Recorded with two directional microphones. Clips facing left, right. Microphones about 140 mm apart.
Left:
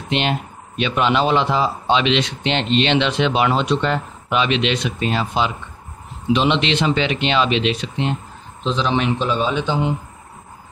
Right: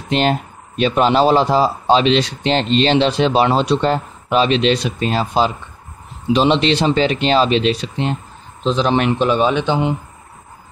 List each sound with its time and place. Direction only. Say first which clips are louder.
0.1 s a man's voice: right 4 dB; 40° right (ahead or behind); by 9.9 s 65° right (ahead or behind)